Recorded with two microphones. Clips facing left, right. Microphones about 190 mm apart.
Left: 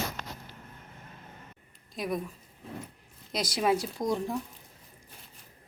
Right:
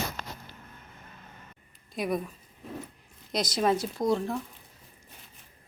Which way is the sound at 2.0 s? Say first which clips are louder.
Right 3 dB; centre (ahead or behind).